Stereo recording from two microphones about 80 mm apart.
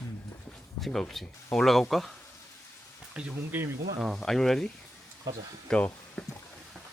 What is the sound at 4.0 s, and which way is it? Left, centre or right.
Speech, centre.